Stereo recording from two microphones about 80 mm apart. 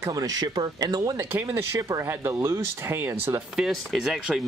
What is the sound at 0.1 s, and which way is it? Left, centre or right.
Speech, right.